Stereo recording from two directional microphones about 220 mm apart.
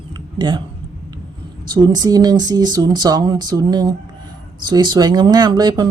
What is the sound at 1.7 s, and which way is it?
Speech, 20° right (ahead or behind).